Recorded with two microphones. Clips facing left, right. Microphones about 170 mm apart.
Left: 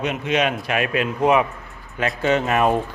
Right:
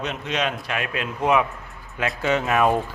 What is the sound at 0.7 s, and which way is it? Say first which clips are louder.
Speech: left 6 dB; 60° left (ahead or behind).